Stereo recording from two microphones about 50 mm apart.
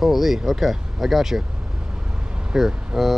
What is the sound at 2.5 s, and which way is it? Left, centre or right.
Speech, centre.